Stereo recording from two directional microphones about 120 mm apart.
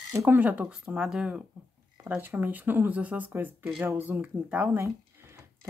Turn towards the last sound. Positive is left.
turn(degrees=-25)  # may be behind; listen again after turning